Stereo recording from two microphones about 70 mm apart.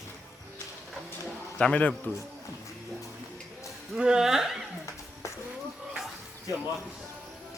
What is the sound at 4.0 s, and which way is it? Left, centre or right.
Speech, centre.